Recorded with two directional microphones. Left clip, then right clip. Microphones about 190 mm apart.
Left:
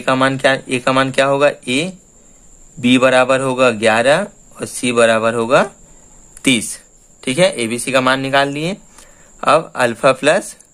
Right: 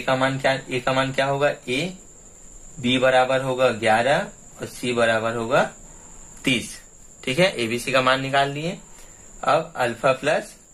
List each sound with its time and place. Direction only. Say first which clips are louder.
0.0 s speech: left 7 dB; 60° left (ahead or behind)
2.8 s speech: left 6 dB; 60° left (ahead or behind)